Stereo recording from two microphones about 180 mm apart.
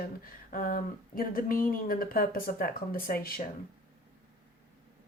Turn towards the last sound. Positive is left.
turn(degrees=55)  # may be behind; listen again after turning